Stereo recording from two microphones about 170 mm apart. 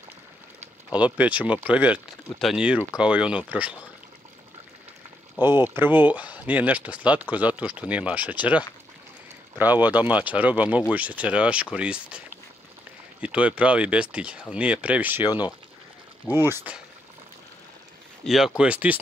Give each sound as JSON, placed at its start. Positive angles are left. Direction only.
{"t": 0.9, "sound": "speech", "side_deg": -10}
{"t": 5.4, "sound": "speech", "side_deg": -15}
{"t": 13.2, "sound": "speech", "side_deg": -5}
{"t": 15.2, "sound": "speech", "side_deg": 25}
{"t": 16.4, "sound": "speech", "side_deg": -10}
{"t": 18.2, "sound": "speech", "side_deg": 0}